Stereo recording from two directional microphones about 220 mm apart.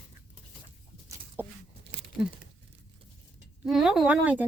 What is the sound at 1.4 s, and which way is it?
Crunch, 10° right (ahead or behind).